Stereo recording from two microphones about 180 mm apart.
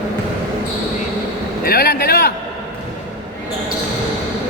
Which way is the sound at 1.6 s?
60° left (ahead or behind).